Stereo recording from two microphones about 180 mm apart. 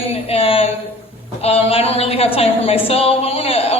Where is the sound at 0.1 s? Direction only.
35° left (ahead or behind).